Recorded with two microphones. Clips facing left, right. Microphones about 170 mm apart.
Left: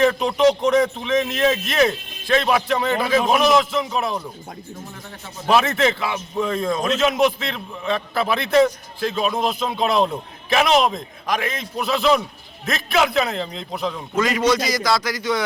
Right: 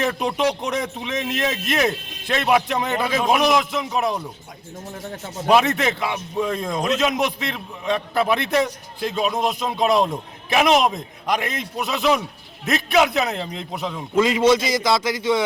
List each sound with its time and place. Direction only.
0.0 s a man's voice: 15° right (ahead or behind)
5.5 s a man's voice: 15° right (ahead or behind)